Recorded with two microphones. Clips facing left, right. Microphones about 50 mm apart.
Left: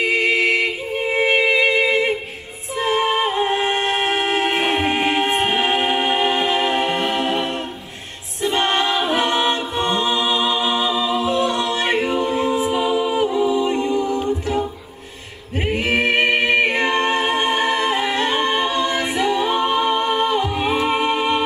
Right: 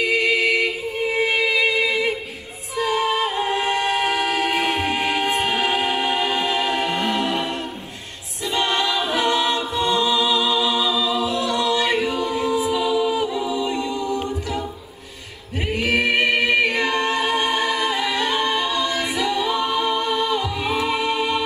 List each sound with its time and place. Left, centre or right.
0.0 s music: left
8.5 s a capella: left
15.6 s a capella: left